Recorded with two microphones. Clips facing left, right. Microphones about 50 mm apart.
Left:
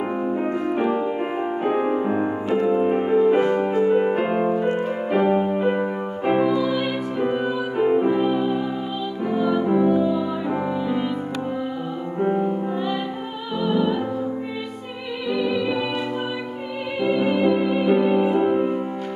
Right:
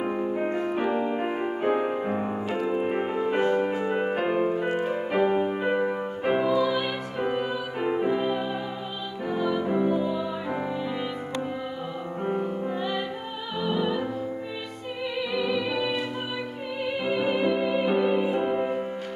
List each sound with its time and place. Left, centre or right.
0.4 s music: centre
2.5 s music: centre
3.3 s music: left
3.8 s music: centre
17.1 s music: centre